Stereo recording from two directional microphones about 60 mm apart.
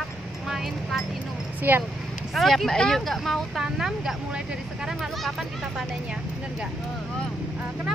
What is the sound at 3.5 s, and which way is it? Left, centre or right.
Speech, centre.